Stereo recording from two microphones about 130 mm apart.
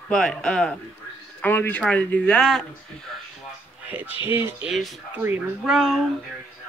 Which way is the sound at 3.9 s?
15° right (ahead or behind).